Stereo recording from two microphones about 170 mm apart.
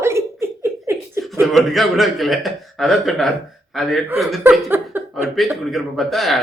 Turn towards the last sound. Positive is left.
turn(degrees=0)  # may be behind; listen again after turning